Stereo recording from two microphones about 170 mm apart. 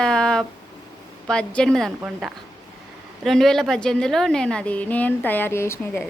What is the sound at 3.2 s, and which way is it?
A woman's voice, centre (ahead or behind).